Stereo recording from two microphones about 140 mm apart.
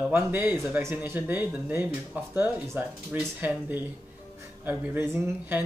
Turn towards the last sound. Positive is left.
turn(degrees=-15)  # may be behind; listen again after turning